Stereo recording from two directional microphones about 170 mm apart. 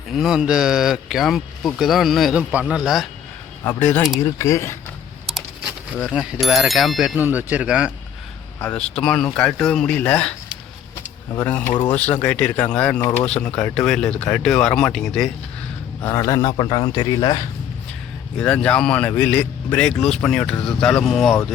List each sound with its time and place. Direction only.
0.1 s speech: centre (ahead or behind)
3.6 s speech: 15° left (ahead or behind)
6.1 s speech: 5° right (ahead or behind)
8.6 s speech: 5° left (ahead or behind)
11.3 s speech: 10° left (ahead or behind)
16.0 s speech: 15° left (ahead or behind)
18.3 s speech: 5° left (ahead or behind)